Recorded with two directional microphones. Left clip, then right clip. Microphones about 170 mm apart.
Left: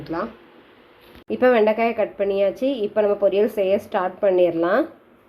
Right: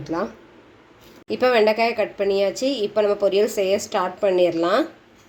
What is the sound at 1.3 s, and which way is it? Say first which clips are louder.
A woman's voice: left 1 dB; centre (ahead or behind).